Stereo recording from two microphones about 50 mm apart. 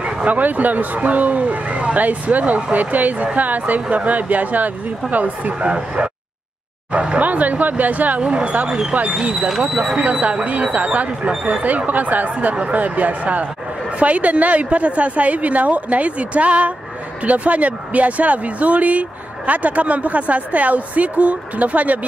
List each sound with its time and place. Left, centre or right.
0.2 s speech: right
7.2 s speech: right
9.3 s speech: centre
10.2 s speech: right